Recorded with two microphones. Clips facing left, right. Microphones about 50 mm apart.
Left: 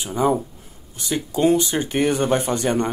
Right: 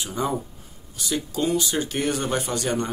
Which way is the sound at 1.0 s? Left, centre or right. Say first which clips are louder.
Left 5 dB; left.